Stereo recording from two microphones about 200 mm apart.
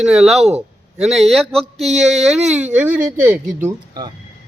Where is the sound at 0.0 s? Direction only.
Centre (ahead or behind).